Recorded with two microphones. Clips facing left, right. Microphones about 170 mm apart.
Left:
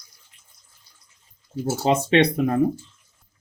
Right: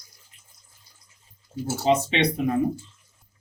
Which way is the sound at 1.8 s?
50° left (ahead or behind).